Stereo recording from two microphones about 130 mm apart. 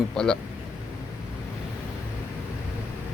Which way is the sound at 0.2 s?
5° left (ahead or behind).